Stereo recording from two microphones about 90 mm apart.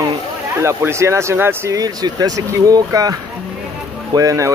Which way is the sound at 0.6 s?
30° right (ahead or behind).